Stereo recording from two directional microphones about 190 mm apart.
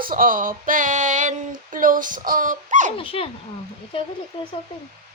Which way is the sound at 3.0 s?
30° left (ahead or behind).